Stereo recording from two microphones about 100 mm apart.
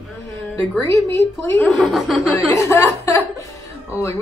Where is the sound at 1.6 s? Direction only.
5° left (ahead or behind).